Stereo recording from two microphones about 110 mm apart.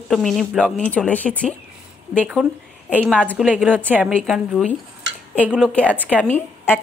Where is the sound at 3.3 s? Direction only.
10° right (ahead or behind).